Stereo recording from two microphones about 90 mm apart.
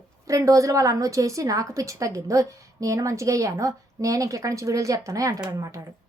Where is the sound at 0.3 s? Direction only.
35° right (ahead or behind).